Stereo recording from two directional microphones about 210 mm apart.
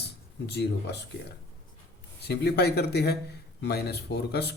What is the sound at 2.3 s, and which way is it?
Speech, 50° left (ahead or behind).